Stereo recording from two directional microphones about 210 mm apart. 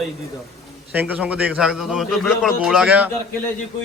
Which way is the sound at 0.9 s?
5° right (ahead or behind).